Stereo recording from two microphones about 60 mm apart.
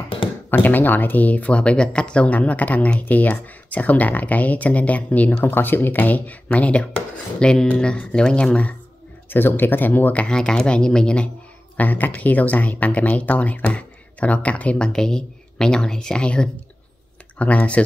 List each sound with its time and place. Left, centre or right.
0.5 s speech: left
9.3 s speech: left
10.2 s speech: centre
11.7 s speech: left